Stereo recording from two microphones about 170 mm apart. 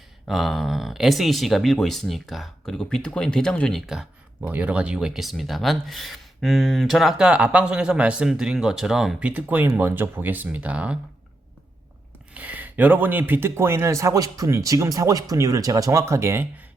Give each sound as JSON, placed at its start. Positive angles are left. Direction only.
{"t": 0.3, "sound": "speech", "side_deg": 0}
{"t": 12.3, "sound": "speech", "side_deg": -10}